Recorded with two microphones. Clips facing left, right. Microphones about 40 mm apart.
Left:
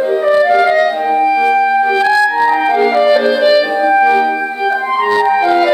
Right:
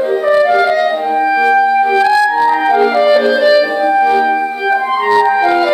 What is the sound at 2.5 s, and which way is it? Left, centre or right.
Clarinet, centre.